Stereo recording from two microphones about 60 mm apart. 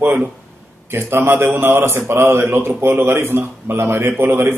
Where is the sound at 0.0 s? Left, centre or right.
Right.